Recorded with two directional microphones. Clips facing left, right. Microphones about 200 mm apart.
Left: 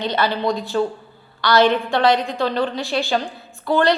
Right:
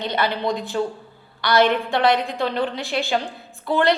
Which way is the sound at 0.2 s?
20° right (ahead or behind).